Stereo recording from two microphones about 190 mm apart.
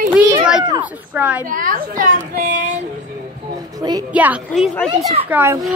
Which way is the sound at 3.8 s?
20° right (ahead or behind).